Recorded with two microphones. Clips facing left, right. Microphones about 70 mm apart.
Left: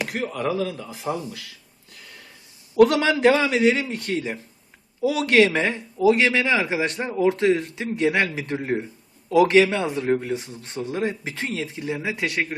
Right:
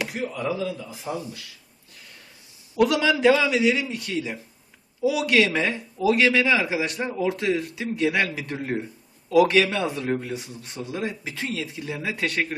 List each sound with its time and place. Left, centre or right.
0.1 s speech: left
2.7 s a man's voice: left
5.5 s a man's voice: left